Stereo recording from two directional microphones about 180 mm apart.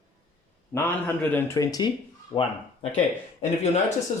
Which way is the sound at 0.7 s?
10° left (ahead or behind).